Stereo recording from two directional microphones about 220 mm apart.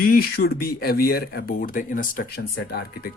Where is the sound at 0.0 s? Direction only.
40° left (ahead or behind).